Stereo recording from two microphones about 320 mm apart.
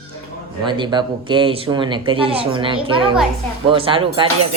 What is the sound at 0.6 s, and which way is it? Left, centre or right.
Speech, centre.